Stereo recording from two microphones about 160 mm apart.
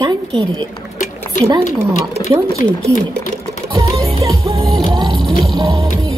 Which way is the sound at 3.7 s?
25° right (ahead or behind).